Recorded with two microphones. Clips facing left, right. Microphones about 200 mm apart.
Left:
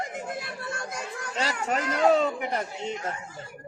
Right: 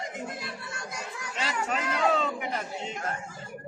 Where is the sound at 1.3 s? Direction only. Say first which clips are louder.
Left 3 dB; 40° left (ahead or behind).